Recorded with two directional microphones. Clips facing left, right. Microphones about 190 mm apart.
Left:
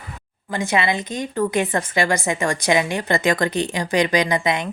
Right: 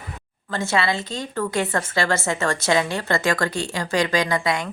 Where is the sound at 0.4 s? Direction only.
15° left (ahead or behind).